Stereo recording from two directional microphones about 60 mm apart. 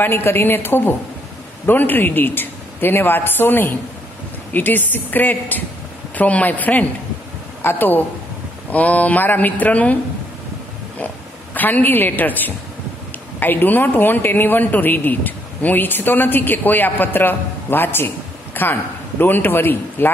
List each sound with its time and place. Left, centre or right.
0.0 s a man's voice: left
11.5 s a man's voice: left